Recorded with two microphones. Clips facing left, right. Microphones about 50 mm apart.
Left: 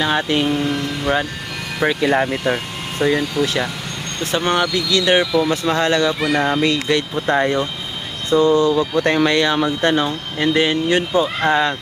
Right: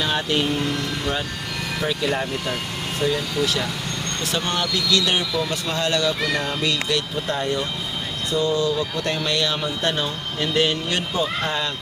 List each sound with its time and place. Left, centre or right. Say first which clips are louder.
0.0 s speech: left 4 dB; centre
1.8 s speech: left 8 dB; left